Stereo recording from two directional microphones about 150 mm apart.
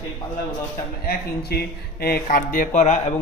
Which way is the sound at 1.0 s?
90° left.